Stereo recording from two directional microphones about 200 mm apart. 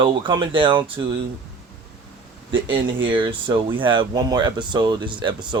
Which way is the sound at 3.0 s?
25° right (ahead or behind).